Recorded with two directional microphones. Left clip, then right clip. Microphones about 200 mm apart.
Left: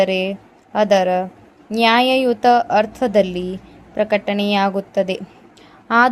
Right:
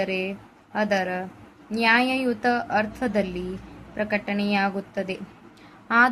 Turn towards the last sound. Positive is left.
turn(degrees=35)  # may be behind; listen again after turning